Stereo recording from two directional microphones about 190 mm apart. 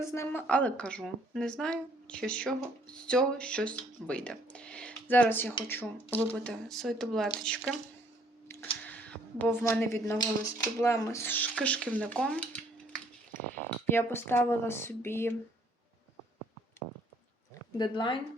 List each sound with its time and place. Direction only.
0.0 s a woman's voice: 15° left (ahead or behind)
8.4 s a sound: 10° left (ahead or behind)
10.8 s speech: 15° left (ahead or behind)
17.5 s speech: 25° left (ahead or behind)